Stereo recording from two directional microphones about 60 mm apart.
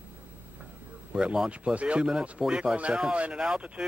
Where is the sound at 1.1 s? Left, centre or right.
Centre.